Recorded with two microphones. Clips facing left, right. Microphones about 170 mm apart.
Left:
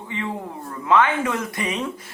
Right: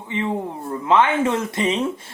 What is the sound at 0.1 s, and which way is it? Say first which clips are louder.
A man's voice: right 5 dB; 20° right (ahead or behind).